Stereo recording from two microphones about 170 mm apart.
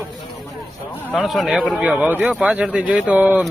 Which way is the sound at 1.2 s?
Centre (ahead or behind).